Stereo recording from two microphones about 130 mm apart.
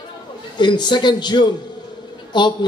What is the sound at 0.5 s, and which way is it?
A man's voice, 35° left (ahead or behind).